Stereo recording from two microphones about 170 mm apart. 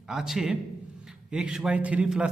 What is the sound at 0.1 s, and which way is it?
A man's voice, centre (ahead or behind).